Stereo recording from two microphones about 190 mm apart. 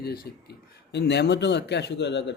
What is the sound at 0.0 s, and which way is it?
Speech, 55° left (ahead or behind).